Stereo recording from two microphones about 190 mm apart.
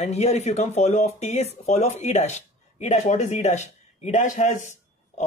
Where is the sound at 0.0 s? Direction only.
35° left (ahead or behind).